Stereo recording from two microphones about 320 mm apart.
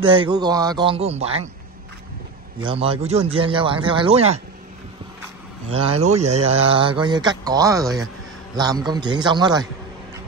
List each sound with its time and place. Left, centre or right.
0.0 s speech: centre
2.6 s speech: centre
5.7 s speech: centre